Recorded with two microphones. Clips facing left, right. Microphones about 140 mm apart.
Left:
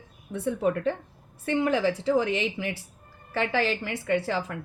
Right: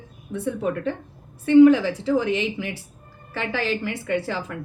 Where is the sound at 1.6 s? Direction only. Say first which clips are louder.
Right 6 dB; 40° left (ahead or behind).